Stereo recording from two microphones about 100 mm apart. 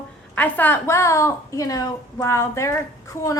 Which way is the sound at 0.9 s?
30° left (ahead or behind).